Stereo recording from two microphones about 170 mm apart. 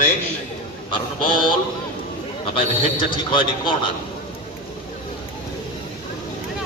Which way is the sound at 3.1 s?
30° left (ahead or behind).